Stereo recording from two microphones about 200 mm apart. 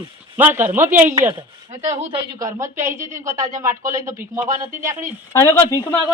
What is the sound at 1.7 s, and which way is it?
Speech, 35° right (ahead or behind).